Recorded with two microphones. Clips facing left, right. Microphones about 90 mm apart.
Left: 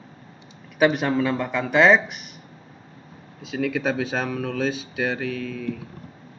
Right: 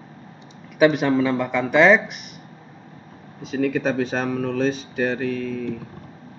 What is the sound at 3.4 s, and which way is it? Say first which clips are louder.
Speech: right 3 dB; centre (ahead or behind).